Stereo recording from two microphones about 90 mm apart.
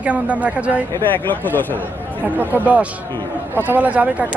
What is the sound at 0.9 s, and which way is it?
Speech, 20° left (ahead or behind).